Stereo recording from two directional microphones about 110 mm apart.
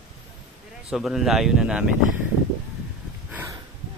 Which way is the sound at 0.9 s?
5° right (ahead or behind).